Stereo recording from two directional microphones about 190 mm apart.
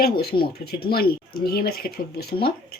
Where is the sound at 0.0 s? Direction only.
55° left (ahead or behind).